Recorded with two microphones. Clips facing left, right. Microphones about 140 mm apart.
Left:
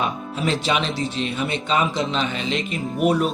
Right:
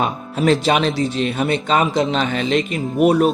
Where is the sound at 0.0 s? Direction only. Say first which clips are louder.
Right 5 dB; 45° right (ahead or behind).